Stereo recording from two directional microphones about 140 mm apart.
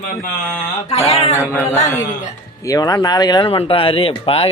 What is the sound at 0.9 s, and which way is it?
Speech, 45° left (ahead or behind).